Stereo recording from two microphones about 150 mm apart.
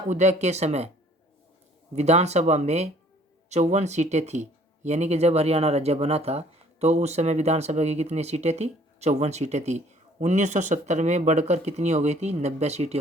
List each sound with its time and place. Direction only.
0.1 s speech: 50° right (ahead or behind)
2.0 s speech: 45° right (ahead or behind)